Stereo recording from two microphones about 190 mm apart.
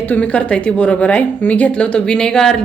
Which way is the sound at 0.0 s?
10° left (ahead or behind).